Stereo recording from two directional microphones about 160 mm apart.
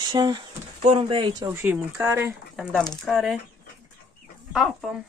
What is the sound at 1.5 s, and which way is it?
Speech, 10° right (ahead or behind).